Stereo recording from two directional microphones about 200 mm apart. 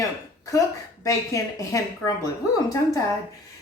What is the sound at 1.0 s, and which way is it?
Speech, 15° left (ahead or behind).